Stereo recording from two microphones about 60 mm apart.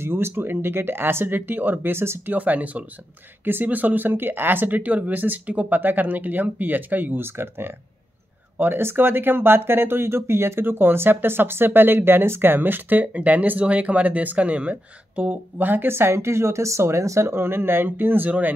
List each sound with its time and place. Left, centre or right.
0.0 s speech: right
2.3 s speech: right